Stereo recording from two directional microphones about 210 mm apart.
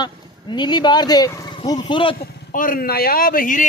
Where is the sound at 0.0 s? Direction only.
20° left (ahead or behind).